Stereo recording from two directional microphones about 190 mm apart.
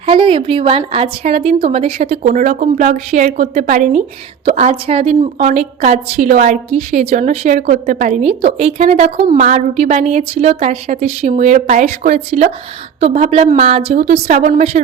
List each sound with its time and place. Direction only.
0.0 s a woman's voice: 25° right (ahead or behind)